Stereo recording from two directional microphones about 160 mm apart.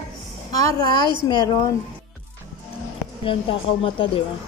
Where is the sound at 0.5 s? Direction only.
25° left (ahead or behind).